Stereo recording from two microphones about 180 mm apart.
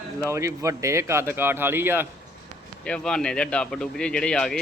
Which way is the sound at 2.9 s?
5° left (ahead or behind).